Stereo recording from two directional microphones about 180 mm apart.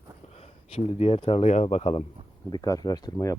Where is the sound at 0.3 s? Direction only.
35° left (ahead or behind).